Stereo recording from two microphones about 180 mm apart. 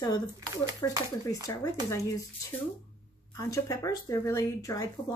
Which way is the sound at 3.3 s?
20° left (ahead or behind).